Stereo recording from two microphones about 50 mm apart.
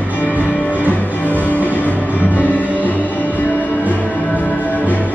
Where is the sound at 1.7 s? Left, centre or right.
Left.